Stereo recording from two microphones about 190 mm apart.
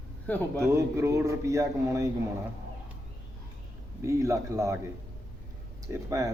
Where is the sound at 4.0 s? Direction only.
15° right (ahead or behind).